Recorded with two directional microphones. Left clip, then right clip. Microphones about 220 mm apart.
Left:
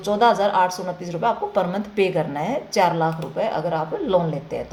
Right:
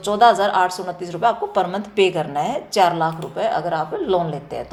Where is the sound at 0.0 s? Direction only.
20° right (ahead or behind).